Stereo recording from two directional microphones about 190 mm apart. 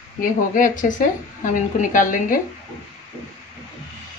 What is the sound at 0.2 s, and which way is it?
A woman's voice, 45° left (ahead or behind).